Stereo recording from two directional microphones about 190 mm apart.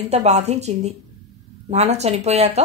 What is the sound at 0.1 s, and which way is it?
A woman's voice, 35° right (ahead or behind).